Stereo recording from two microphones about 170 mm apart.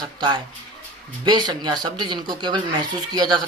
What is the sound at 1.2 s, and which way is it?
Speech, 25° right (ahead or behind).